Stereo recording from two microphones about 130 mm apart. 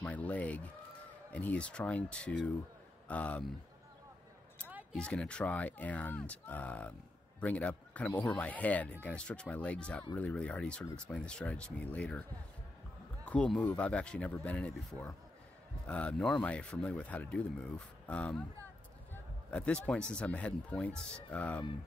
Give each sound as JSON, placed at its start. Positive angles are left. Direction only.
{"t": 0.0, "sound": "speech", "side_deg": 10}
{"t": 4.9, "sound": "a man's voice", "side_deg": 10}
{"t": 19.5, "sound": "speech", "side_deg": 10}